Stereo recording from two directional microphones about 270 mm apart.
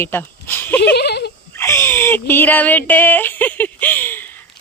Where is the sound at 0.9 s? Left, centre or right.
Left.